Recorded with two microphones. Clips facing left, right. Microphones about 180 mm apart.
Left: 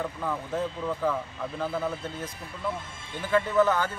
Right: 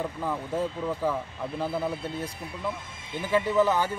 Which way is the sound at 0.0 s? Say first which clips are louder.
Right 1 dB; 10° right (ahead or behind).